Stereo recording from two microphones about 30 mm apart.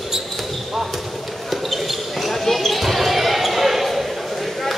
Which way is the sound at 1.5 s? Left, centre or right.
Centre.